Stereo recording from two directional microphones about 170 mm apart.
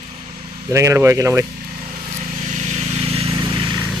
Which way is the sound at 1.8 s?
35° right (ahead or behind).